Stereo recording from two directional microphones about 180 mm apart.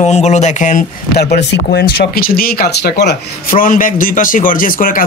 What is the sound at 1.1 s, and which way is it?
Speech, 70° left (ahead or behind).